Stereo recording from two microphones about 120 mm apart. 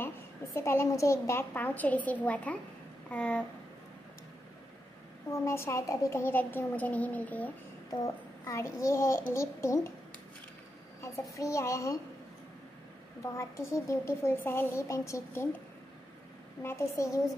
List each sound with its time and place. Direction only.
0.6 s a child's voice: 20° left (ahead or behind)
5.4 s a child's voice: 25° left (ahead or behind)
7.9 s speech: 30° left (ahead or behind)
11.3 s speech: 25° left (ahead or behind)
13.2 s speech: 25° left (ahead or behind)
16.6 s speech: 25° left (ahead or behind)